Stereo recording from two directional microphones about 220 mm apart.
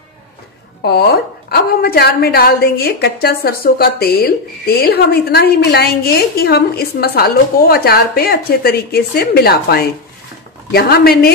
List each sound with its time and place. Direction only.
0.8 s a woman's voice: 45° left (ahead or behind)